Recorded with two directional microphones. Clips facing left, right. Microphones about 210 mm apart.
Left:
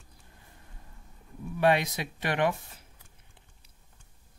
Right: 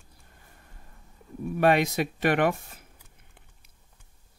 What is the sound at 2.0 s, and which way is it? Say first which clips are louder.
Speech: right 5 dB; 55° right (ahead or behind).